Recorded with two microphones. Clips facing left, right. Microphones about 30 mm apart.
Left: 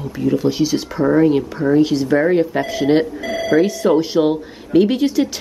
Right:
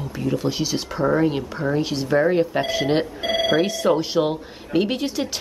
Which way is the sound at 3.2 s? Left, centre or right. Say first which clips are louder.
Left 1 dB; right.